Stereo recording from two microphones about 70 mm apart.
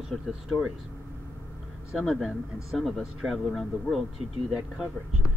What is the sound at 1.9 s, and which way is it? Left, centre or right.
Speech, centre.